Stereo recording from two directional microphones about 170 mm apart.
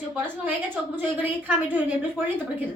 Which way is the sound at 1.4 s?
10° right (ahead or behind).